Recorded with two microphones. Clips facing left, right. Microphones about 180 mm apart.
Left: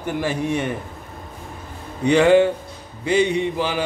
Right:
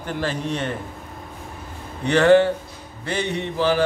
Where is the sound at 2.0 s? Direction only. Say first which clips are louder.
Left 1 dB; 10° left (ahead or behind).